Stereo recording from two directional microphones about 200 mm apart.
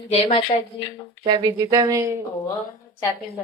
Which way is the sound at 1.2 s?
20° right (ahead or behind).